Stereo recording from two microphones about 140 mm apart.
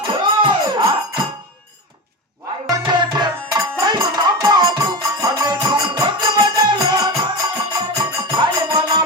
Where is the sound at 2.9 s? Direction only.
30° right (ahead or behind).